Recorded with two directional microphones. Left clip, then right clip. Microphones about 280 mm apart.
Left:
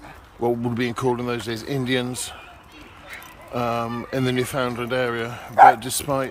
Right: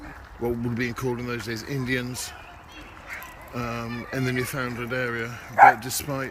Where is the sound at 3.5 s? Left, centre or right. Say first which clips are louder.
Left 8 dB; centre.